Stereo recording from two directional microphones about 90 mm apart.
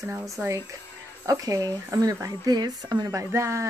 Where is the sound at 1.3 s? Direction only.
40° right (ahead or behind).